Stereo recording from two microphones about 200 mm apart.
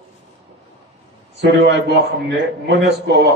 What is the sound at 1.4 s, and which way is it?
Speech, 60° right (ahead or behind).